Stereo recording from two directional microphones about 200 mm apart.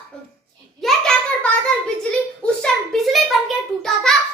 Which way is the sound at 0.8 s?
5° left (ahead or behind).